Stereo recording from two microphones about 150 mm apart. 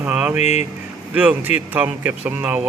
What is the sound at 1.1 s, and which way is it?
Speech, 10° right (ahead or behind).